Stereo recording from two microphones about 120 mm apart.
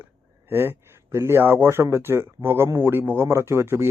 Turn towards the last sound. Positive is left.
turn(degrees=-20)  # may be behind; listen again after turning